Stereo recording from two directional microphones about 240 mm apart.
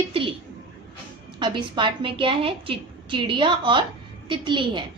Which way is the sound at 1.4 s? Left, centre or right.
Centre.